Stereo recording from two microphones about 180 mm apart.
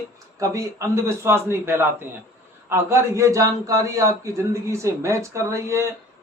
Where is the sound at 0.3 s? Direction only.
15° right (ahead or behind).